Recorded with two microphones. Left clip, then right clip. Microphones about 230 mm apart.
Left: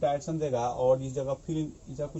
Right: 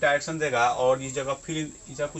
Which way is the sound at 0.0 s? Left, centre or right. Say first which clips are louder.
Right 5 dB; right.